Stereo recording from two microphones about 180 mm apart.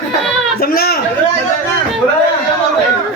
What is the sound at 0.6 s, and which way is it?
Speech, 60° left (ahead or behind).